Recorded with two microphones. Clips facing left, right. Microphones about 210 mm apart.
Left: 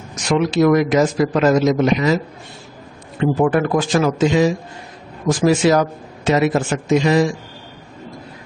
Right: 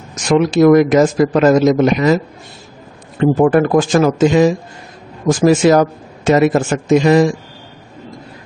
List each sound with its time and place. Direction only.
0.1 s speech: 45° right (ahead or behind)
3.2 s speech: 45° right (ahead or behind)